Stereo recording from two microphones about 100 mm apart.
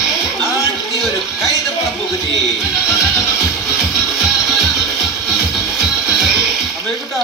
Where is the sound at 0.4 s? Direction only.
35° left (ahead or behind).